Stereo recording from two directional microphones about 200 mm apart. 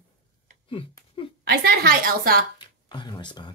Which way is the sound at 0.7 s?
25° left (ahead or behind).